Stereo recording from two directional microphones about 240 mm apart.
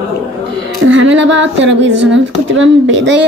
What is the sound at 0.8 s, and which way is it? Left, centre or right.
Speech, right.